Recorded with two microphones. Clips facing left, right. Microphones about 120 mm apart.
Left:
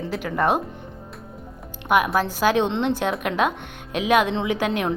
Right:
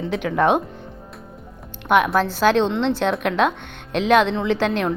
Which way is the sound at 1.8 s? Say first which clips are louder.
Right 2 dB; 5° left (ahead or behind).